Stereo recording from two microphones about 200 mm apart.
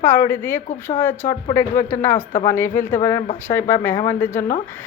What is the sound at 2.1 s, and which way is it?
Speech, 40° left (ahead or behind).